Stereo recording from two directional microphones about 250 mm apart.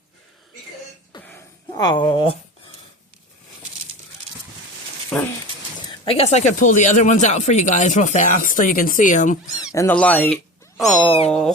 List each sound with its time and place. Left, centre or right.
1.1 s a sound: centre
5.1 s speech: centre
6.1 s speech: left
9.7 s speech: centre